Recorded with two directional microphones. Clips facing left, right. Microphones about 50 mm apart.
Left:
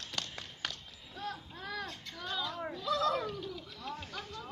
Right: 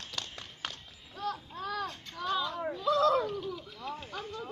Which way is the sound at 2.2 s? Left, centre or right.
Right.